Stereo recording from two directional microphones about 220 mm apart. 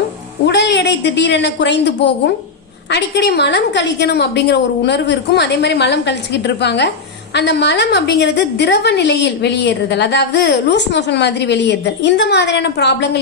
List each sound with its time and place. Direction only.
0.5 s a woman's voice: 50° left (ahead or behind)